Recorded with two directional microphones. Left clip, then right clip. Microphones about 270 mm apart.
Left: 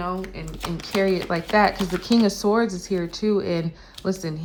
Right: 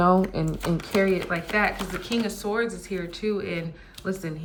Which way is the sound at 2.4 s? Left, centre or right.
Centre.